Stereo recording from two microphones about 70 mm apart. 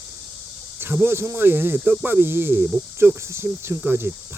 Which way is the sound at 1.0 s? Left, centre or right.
Right.